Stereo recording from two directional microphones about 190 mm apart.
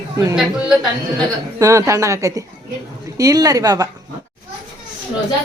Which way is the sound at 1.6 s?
15° right (ahead or behind).